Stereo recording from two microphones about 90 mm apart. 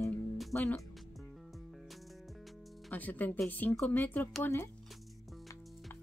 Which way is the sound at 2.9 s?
15° left (ahead or behind).